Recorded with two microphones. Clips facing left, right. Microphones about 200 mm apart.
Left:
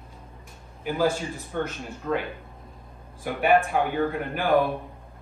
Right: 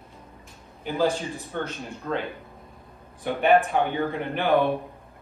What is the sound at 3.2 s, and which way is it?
Speech, centre (ahead or behind).